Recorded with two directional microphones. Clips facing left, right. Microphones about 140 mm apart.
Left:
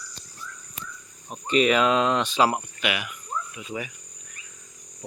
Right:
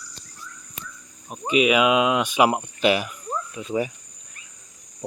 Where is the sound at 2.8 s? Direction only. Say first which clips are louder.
Right 8 dB; 35° right (ahead or behind).